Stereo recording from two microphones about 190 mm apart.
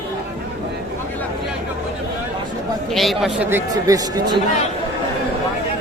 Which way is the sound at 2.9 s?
Centre (ahead or behind).